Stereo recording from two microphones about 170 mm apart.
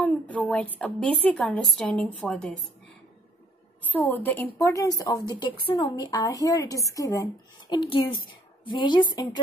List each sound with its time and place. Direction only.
0.0 s a woman's voice: 5° left (ahead or behind)
3.8 s a woman's voice: 10° left (ahead or behind)
7.7 s speech: 30° left (ahead or behind)